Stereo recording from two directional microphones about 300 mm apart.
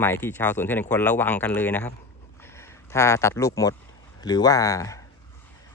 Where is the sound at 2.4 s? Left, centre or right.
Centre.